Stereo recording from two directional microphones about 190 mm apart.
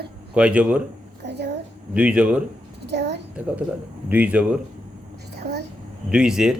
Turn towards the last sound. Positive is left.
turn(degrees=-5)  # may be behind; listen again after turning